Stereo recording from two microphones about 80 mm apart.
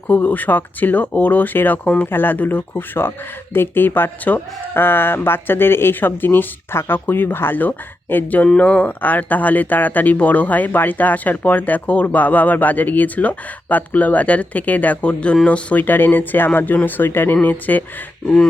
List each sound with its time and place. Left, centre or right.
0.1 s speech: left